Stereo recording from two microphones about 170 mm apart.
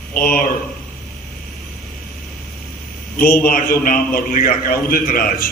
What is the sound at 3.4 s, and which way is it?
A man's voice, 60° left (ahead or behind).